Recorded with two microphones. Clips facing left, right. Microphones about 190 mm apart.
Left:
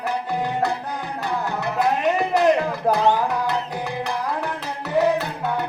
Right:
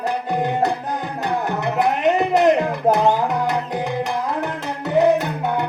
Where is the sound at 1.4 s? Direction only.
20° right (ahead or behind).